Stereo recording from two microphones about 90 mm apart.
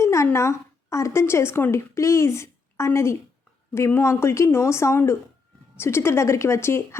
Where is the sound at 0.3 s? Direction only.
30° left (ahead or behind).